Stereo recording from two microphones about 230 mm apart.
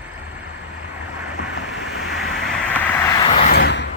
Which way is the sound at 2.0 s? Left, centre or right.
Centre.